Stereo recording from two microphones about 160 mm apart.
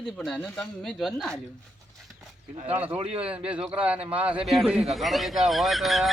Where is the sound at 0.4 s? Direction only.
5° left (ahead or behind).